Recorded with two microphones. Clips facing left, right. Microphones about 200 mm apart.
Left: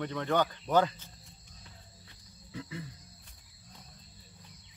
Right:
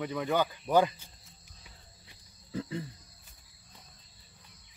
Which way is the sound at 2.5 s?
35° right (ahead or behind).